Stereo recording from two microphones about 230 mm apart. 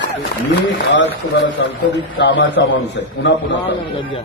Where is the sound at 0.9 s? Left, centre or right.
Left.